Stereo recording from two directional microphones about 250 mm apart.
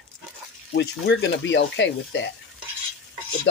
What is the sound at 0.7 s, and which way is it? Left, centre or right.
Speech, left.